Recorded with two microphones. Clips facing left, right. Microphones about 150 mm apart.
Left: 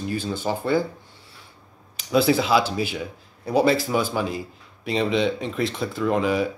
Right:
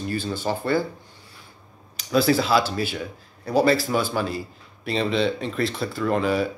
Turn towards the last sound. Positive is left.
turn(degrees=15)  # may be behind; listen again after turning